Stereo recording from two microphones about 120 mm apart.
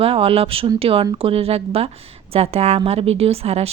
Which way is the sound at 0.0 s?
55° right (ahead or behind).